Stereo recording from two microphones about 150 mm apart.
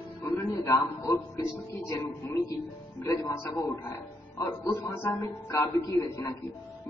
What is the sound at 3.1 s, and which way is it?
Speech, 20° left (ahead or behind).